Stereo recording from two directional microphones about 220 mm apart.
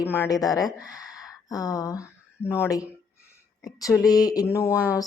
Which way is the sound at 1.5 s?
15° left (ahead or behind).